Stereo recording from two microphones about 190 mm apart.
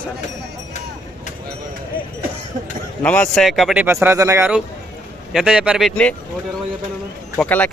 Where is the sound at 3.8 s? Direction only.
10° right (ahead or behind); by 6.1 s 5° left (ahead or behind).